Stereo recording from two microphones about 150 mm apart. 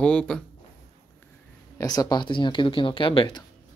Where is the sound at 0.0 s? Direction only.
5° left (ahead or behind).